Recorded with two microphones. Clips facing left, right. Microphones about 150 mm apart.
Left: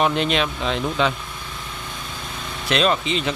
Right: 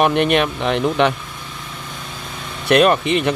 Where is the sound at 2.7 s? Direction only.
60° right (ahead or behind).